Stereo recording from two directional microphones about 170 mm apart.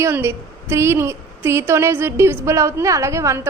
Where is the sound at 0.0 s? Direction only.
15° right (ahead or behind).